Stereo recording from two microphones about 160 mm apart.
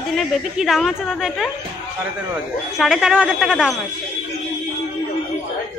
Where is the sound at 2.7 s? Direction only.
Centre (ahead or behind).